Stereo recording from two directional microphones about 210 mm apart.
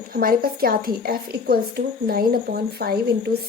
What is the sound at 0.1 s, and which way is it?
A woman's voice, 45° right (ahead or behind).